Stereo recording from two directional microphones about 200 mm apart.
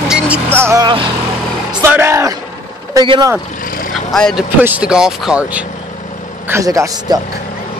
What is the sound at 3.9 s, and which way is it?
A man's voice, centre (ahead or behind).